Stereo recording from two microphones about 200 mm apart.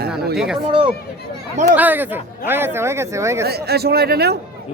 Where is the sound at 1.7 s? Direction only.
10° right (ahead or behind).